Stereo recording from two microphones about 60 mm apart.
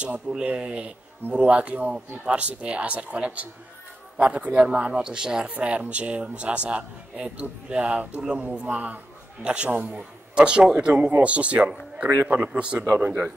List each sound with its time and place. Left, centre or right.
0.3 s a man's voice: centre